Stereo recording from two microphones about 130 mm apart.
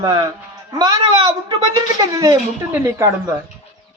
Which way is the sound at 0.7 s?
30° right (ahead or behind).